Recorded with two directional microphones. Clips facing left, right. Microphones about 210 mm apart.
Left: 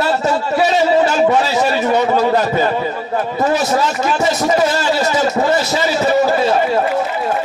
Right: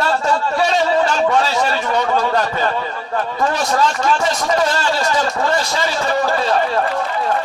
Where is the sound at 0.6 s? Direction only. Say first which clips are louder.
Left 4 dB; 5° left (ahead or behind).